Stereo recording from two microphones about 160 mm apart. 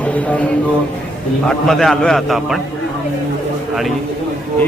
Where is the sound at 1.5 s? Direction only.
5° left (ahead or behind).